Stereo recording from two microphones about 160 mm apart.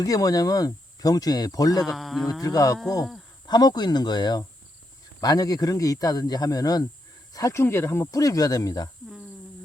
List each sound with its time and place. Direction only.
0.0 s speech: 20° left (ahead or behind)
1.8 s speech: centre (ahead or behind)
2.4 s speech: 20° left (ahead or behind)